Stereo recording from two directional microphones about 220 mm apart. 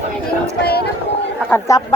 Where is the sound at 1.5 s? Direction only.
10° left (ahead or behind).